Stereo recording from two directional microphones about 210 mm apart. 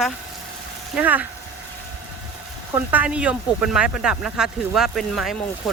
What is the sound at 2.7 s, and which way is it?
Speech, 5° right (ahead or behind).